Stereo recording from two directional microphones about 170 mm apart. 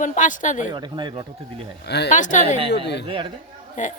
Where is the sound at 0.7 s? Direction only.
25° right (ahead or behind).